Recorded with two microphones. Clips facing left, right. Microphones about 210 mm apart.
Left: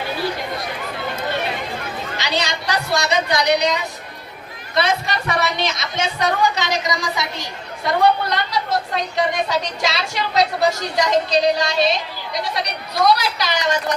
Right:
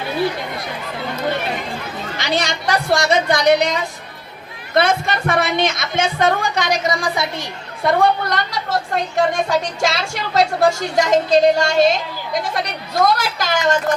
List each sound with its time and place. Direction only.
2.1 s a woman's voice: 50° right (ahead or behind)